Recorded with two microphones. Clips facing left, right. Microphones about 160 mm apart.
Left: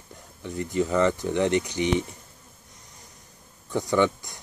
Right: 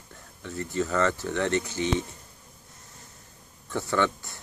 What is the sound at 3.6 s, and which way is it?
Speech, 15° left (ahead or behind).